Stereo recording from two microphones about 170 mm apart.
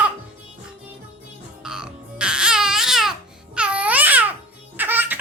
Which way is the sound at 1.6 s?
5° right (ahead or behind).